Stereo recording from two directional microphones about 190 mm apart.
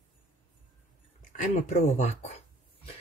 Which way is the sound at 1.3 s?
40° left (ahead or behind).